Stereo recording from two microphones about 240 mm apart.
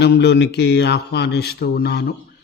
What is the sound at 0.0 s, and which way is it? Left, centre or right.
A man's voice, left.